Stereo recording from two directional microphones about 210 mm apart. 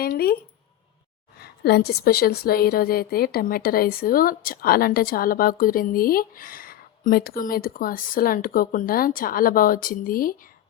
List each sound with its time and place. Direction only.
0.0 s a woman's voice: 45° left (ahead or behind)
1.4 s a woman's voice: 50° left (ahead or behind)